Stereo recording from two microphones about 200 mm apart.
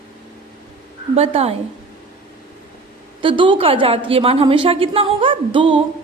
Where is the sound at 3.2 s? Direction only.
25° right (ahead or behind).